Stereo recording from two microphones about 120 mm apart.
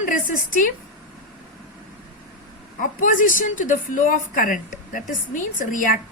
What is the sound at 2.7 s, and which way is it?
A woman's voice, 90° left.